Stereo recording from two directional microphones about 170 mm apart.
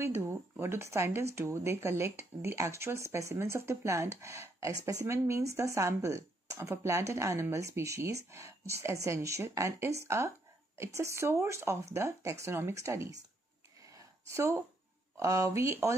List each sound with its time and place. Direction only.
0.0 s speech: 15° right (ahead or behind)
13.8 s a sound: 15° right (ahead or behind)
15.1 s speech: 15° right (ahead or behind)